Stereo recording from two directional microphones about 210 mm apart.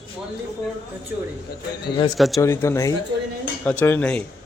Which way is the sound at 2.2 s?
Centre (ahead or behind).